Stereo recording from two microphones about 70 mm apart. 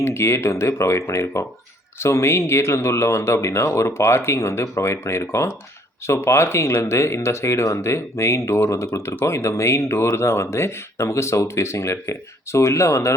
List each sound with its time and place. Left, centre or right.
0.0 s speech: left